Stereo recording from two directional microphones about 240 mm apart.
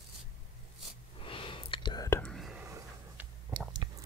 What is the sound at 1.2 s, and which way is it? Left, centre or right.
Whispering, left.